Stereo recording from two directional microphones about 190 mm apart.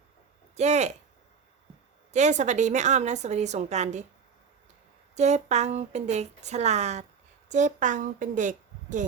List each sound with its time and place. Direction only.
0.5 s a woman's voice: 35° right (ahead or behind)
2.1 s a woman's voice: 40° right (ahead or behind)
5.1 s a woman's voice: 35° right (ahead or behind)